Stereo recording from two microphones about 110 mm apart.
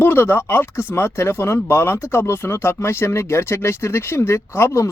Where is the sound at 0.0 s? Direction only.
20° left (ahead or behind).